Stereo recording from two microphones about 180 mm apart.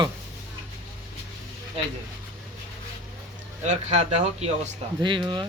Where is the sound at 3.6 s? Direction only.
40° right (ahead or behind).